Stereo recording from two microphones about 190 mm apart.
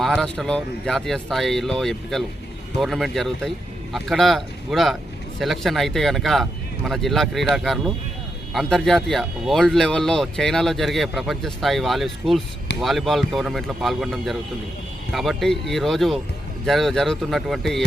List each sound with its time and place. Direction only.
0.0 s speech: centre (ahead or behind)